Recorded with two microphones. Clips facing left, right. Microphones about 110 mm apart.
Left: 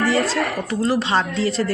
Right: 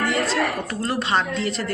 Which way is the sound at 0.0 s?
30° left (ahead or behind).